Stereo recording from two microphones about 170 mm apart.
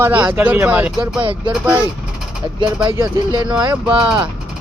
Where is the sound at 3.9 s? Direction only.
5° right (ahead or behind).